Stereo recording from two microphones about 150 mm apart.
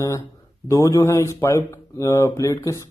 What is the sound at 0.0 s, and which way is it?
Speech, 20° left (ahead or behind).